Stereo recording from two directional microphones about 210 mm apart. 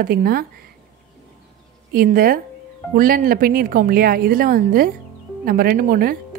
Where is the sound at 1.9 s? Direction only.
45° right (ahead or behind).